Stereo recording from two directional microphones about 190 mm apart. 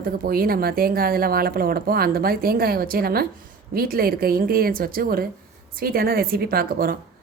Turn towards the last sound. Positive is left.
turn(degrees=-50)  # may be behind; listen again after turning